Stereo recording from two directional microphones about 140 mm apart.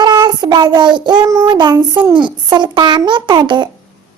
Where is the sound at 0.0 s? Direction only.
30° right (ahead or behind).